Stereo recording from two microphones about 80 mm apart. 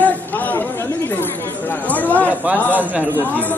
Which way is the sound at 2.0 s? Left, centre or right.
Left.